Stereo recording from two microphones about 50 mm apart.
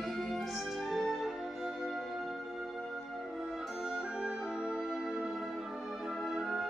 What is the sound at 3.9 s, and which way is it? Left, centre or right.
Music, centre.